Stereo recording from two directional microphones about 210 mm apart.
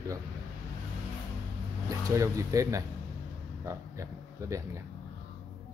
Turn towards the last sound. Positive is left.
turn(degrees=-15)  # may be behind; listen again after turning